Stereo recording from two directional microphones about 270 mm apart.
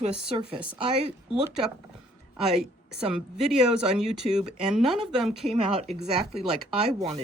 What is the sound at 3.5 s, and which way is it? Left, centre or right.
Speech, centre.